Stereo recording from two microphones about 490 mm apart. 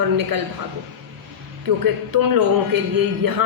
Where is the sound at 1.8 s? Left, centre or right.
Right.